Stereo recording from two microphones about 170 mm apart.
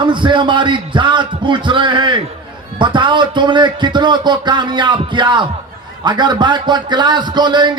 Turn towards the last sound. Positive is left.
turn(degrees=-25)  # may be behind; listen again after turning